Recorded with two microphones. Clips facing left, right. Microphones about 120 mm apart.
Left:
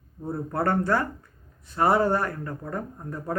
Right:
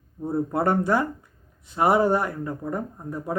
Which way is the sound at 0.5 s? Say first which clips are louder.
Right 1 dB; 15° right (ahead or behind).